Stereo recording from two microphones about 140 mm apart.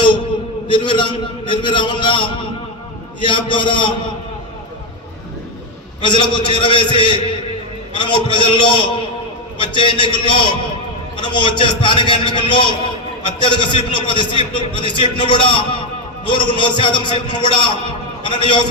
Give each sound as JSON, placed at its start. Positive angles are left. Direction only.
{"t": 0.7, "sound": "a man's voice", "side_deg": 35}
{"t": 6.0, "sound": "a man's voice", "side_deg": 35}